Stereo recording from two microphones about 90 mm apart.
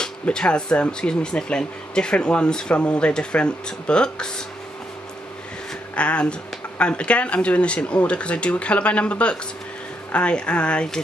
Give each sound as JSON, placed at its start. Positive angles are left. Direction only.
{"t": 0.0, "sound": "speech", "side_deg": 10}
{"t": 5.9, "sound": "speech", "side_deg": 15}